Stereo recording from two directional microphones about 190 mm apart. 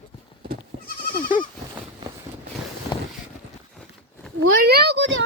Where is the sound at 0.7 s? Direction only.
65° right (ahead or behind).